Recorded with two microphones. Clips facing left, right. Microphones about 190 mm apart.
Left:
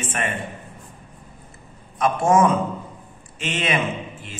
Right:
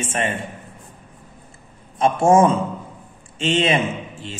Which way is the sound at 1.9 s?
30° right (ahead or behind).